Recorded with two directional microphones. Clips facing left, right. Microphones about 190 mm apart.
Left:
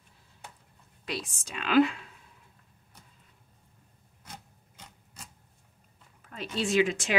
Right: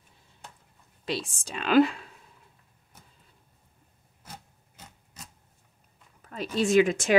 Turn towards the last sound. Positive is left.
turn(degrees=-45)  # may be behind; listen again after turning